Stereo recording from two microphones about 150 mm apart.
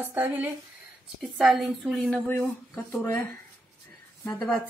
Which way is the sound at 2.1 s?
10° left (ahead or behind).